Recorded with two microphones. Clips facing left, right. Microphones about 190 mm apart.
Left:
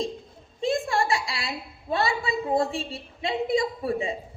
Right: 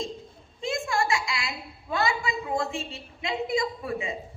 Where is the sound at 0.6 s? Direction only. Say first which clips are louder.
Left 3 dB; 35° left (ahead or behind).